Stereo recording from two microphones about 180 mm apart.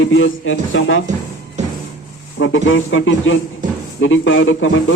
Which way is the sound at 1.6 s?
40° right (ahead or behind).